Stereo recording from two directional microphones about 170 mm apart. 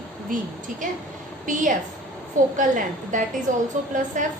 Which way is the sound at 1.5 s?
50° right (ahead or behind).